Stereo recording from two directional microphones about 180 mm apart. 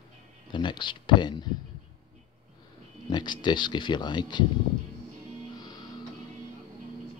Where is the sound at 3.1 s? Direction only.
25° left (ahead or behind).